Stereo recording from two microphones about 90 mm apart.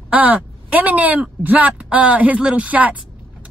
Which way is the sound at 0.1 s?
20° right (ahead or behind).